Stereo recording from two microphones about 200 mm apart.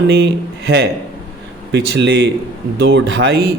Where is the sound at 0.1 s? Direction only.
55° right (ahead or behind).